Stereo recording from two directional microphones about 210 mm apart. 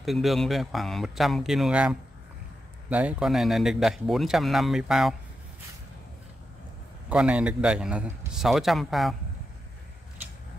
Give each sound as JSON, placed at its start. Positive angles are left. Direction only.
{"t": 0.0, "sound": "speech", "side_deg": 0}
{"t": 7.1, "sound": "speech", "side_deg": -5}